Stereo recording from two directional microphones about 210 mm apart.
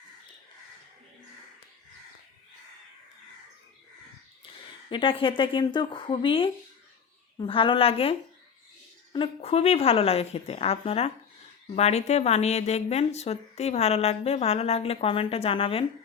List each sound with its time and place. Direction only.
4.9 s a woman's voice: 25° left (ahead or behind)
9.1 s a woman's voice: 25° left (ahead or behind)